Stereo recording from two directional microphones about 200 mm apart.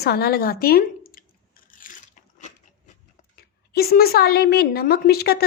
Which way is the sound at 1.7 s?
40° left (ahead or behind).